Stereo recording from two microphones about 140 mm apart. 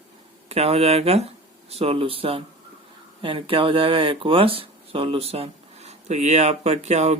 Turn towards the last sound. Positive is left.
turn(degrees=-55)  # may be behind; listen again after turning